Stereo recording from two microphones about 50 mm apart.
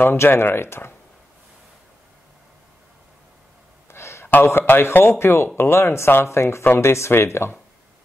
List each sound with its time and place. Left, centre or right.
0.0 s speech: left
3.9 s a sound: left
4.5 s speech: left